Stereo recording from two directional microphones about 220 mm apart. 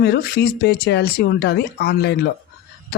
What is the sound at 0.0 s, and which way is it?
Speech, 45° left (ahead or behind).